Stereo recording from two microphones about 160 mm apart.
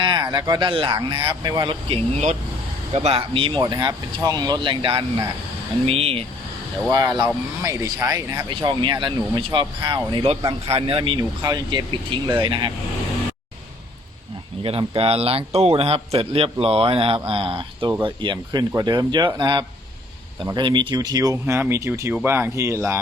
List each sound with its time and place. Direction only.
0.0 s speech: 30° right (ahead or behind)
2.1 s speech: 40° right (ahead or behind)
6.9 s speech: 25° right (ahead or behind)
14.6 s speech: 35° right (ahead or behind); by 23.0 s 15° right (ahead or behind)